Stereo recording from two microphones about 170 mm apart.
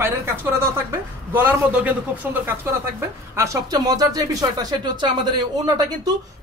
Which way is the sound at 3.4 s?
20° right (ahead or behind).